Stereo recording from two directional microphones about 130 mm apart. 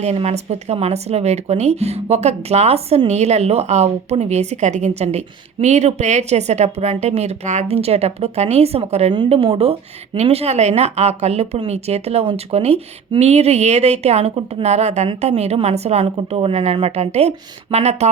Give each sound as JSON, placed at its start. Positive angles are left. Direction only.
{"t": 0.0, "sound": "speech", "side_deg": -55}